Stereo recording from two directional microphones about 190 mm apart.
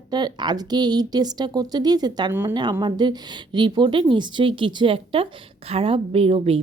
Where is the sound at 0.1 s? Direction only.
20° right (ahead or behind).